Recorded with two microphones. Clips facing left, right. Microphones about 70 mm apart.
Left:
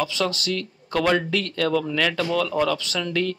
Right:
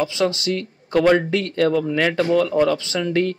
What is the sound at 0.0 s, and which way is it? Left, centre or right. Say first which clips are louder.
Speech: right 4 dB; right.